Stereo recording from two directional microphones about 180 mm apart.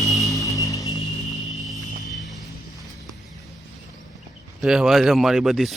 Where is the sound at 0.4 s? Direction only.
20° left (ahead or behind).